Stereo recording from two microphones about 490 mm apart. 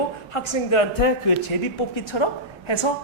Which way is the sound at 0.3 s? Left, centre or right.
Left.